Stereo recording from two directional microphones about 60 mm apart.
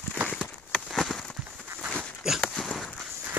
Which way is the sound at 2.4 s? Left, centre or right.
Centre.